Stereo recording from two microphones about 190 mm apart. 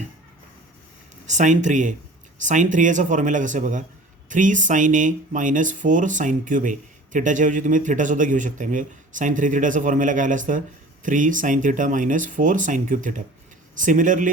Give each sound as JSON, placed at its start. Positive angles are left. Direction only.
{"t": 1.3, "sound": "speech", "side_deg": -40}